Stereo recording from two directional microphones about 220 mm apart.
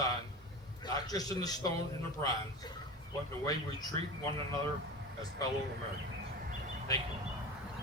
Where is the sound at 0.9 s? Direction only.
15° left (ahead or behind).